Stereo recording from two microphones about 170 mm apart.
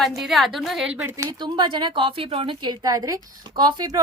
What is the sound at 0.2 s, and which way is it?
Speech, centre (ahead or behind).